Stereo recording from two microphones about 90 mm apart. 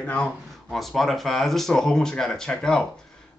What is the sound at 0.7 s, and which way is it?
Speech, centre (ahead or behind).